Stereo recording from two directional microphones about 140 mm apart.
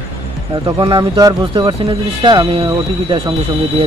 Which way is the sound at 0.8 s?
40° right (ahead or behind).